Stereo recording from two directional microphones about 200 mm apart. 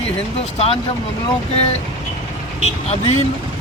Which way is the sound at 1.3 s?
30° left (ahead or behind).